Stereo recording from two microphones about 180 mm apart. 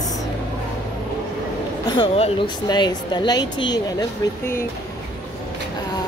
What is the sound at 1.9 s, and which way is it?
Speech, 30° left (ahead or behind).